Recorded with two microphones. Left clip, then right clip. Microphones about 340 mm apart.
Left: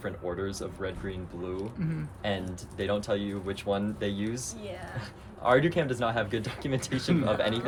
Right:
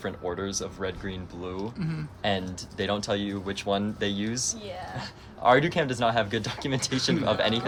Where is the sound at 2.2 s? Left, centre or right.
Right.